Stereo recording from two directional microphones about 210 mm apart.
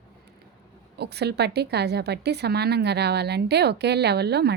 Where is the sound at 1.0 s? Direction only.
50° right (ahead or behind).